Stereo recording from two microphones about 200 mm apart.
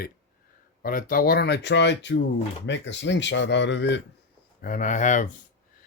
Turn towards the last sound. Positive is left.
turn(degrees=40)  # may be behind; listen again after turning